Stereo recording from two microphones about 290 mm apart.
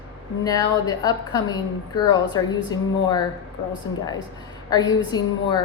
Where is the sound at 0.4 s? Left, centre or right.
Centre.